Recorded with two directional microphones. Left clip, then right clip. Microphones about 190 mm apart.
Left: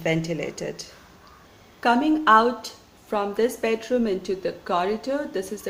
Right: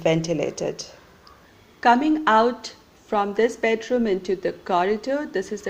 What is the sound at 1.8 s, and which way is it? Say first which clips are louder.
A woman's voice: right 3 dB; 15° right (ahead or behind).